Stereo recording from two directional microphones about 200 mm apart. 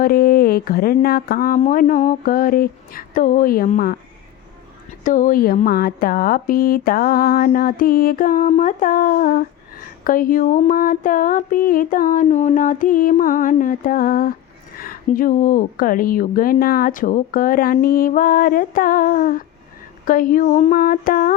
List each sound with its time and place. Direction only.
0.0 s speech: 50° left (ahead or behind)
5.0 s speech: 40° left (ahead or behind)